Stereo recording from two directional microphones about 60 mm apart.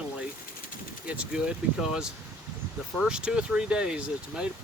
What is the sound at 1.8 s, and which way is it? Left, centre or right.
Speech, centre.